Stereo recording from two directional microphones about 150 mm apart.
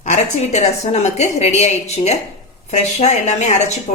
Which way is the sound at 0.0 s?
50° left (ahead or behind).